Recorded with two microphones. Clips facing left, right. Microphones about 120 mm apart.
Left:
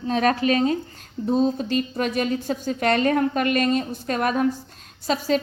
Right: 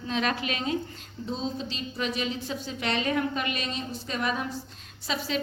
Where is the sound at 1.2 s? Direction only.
50° left (ahead or behind).